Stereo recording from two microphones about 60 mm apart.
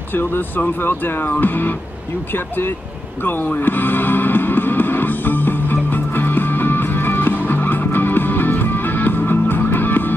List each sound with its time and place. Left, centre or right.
0.1 s speech: left
3.4 s music: left